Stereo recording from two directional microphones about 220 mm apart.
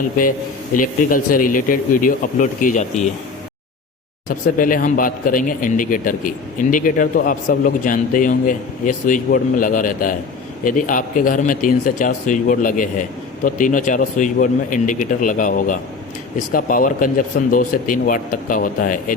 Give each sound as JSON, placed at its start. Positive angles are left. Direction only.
{"t": 0.8, "sound": "speech", "side_deg": 40}
{"t": 4.3, "sound": "speech", "side_deg": 40}